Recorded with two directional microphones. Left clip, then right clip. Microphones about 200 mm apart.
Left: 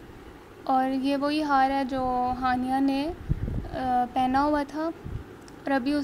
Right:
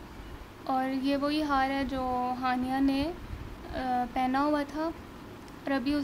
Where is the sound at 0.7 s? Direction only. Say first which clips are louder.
Left 5 dB; 20° left (ahead or behind).